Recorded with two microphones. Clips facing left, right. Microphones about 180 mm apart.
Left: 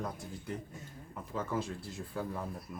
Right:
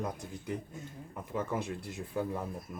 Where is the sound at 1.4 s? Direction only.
20° right (ahead or behind).